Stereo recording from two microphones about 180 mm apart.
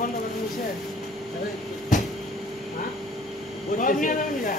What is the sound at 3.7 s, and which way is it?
Speech, 50° left (ahead or behind).